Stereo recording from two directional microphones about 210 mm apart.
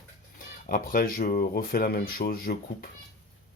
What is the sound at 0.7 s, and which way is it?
Speech, 45° left (ahead or behind).